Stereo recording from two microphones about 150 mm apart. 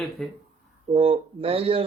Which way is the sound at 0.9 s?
40° right (ahead or behind).